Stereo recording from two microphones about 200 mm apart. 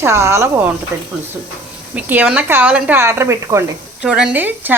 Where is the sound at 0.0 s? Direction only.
15° right (ahead or behind).